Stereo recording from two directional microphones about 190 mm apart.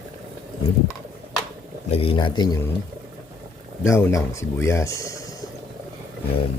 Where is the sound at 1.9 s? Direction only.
25° left (ahead or behind).